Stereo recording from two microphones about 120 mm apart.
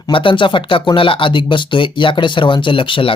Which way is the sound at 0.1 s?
45° left (ahead or behind).